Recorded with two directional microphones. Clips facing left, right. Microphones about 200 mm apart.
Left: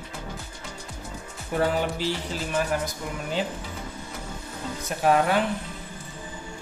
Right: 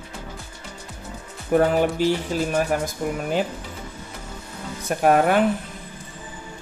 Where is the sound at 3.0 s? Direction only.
50° right (ahead or behind).